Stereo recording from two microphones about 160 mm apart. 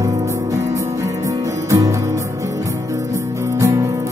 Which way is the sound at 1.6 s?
20° right (ahead or behind).